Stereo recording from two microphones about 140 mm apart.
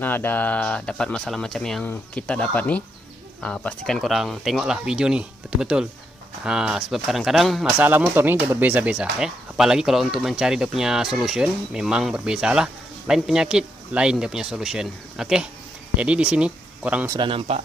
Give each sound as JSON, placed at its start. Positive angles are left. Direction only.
{"t": 0.0, "sound": "speech", "side_deg": 15}
{"t": 7.8, "sound": "speech", "side_deg": -10}
{"t": 17.1, "sound": "speech", "side_deg": -35}